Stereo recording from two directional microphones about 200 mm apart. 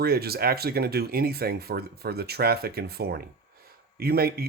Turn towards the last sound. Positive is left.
turn(degrees=-50)  # may be behind; listen again after turning